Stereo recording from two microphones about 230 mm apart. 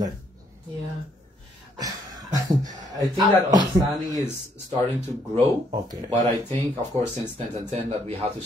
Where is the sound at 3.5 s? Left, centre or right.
Centre.